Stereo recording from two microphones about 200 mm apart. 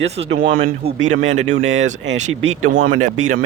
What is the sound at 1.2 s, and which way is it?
Speech, 75° right (ahead or behind).